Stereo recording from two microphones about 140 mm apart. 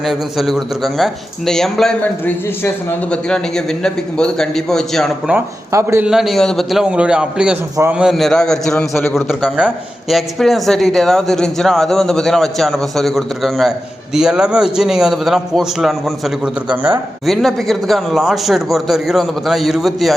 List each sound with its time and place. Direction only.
0.0 s speech: centre (ahead or behind)
5.7 s a man's voice: 20° right (ahead or behind)
6.1 s speech: centre (ahead or behind)
17.2 s speech: centre (ahead or behind)